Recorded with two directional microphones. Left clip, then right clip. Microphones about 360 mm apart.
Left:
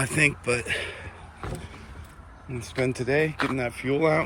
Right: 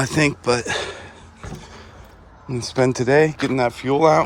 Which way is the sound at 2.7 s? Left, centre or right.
Right.